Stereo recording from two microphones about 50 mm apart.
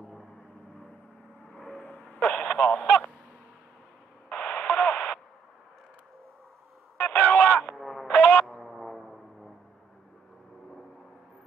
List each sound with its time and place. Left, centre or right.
1.5 s vehicle: centre
1.9 s a sound: left
2.4 s honk: left
4.3 s radio: left
7.0 s radio: left
7.7 s music: centre
8.1 s a sound: left
8.5 s music: centre